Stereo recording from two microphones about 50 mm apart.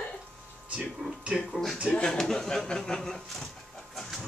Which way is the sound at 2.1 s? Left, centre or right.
Centre.